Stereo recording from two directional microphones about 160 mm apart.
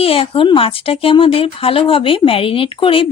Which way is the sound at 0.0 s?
35° left (ahead or behind).